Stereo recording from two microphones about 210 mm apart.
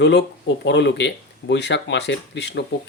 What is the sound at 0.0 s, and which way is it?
Speech, 55° left (ahead or behind).